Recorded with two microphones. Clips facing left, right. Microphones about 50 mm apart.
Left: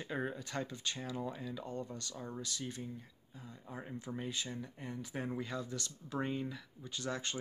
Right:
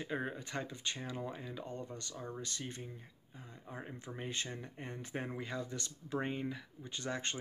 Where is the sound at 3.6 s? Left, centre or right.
Centre.